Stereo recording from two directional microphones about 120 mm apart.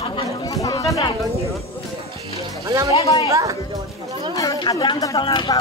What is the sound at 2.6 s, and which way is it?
Speech, 30° right (ahead or behind).